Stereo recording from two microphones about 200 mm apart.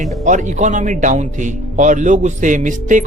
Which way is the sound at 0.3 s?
40° right (ahead or behind).